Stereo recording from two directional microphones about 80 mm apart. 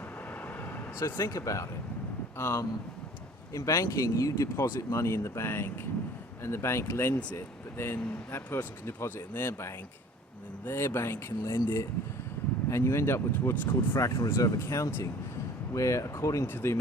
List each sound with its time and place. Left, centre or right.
0.9 s speech: left
2.4 s speech: left
14.0 s speech: left